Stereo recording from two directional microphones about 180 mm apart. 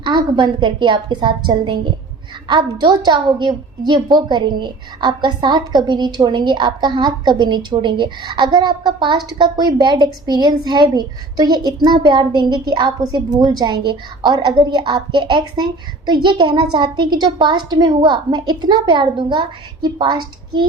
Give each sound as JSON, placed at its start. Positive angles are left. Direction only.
{"t": 0.0, "sound": "a woman's voice", "side_deg": -25}